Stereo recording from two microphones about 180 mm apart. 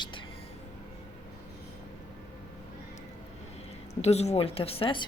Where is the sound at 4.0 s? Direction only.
35° left (ahead or behind).